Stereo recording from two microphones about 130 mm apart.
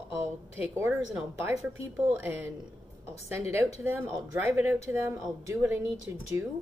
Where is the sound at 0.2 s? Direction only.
20° right (ahead or behind).